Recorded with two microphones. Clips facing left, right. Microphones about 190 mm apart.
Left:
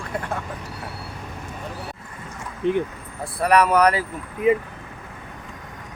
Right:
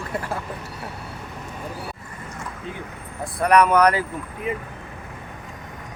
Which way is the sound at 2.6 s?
65° left (ahead or behind).